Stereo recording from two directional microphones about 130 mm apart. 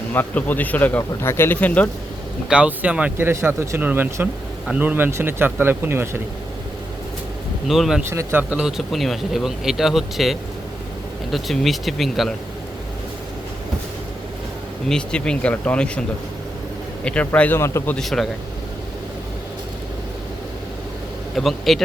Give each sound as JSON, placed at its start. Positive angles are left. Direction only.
{"t": 0.1, "sound": "speech", "side_deg": 15}
{"t": 2.5, "sound": "speech", "side_deg": -10}
{"t": 7.7, "sound": "speech", "side_deg": -5}
{"t": 8.1, "sound": "speech", "side_deg": -20}
{"t": 14.8, "sound": "speech", "side_deg": 5}
{"t": 17.6, "sound": "speech", "side_deg": 20}
{"t": 17.9, "sound": "speech", "side_deg": 0}
{"t": 21.3, "sound": "speech", "side_deg": 0}